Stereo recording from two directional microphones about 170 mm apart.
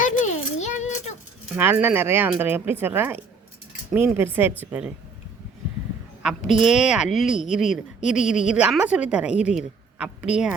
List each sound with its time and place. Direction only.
0.0 s a sound: 45° left (ahead or behind)
1.5 s a woman's voice: 10° right (ahead or behind)
6.7 s a woman's voice: 5° right (ahead or behind)